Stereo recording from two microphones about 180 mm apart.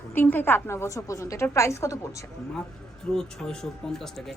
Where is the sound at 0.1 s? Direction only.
10° left (ahead or behind).